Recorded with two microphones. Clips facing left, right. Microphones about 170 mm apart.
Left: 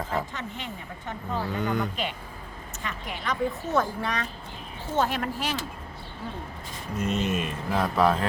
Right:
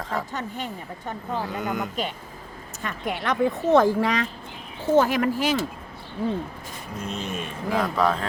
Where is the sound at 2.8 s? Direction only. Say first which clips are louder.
Right 6 dB; 60° right (ahead or behind); by 5.6 s 90° right.